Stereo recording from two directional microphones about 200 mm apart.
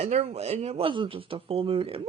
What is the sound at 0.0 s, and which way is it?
Speech, 30° right (ahead or behind).